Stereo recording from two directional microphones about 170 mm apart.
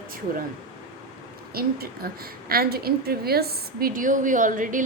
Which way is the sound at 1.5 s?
60° right (ahead or behind).